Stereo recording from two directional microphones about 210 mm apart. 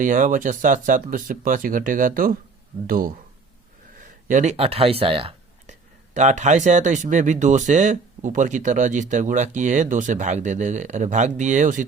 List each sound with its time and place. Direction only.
0.0 s speech: 35° right (ahead or behind)
4.3 s speech: 35° right (ahead or behind)